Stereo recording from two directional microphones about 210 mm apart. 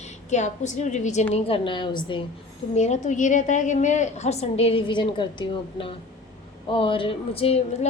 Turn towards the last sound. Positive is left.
turn(degrees=25)  # may be behind; listen again after turning